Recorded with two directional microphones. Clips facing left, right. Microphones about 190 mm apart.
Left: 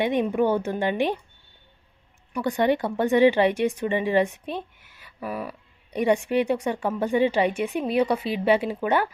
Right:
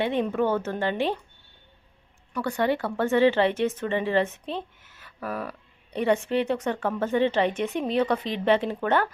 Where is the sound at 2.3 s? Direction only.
20° left (ahead or behind).